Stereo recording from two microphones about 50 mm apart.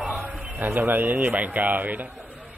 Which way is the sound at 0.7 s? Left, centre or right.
Right.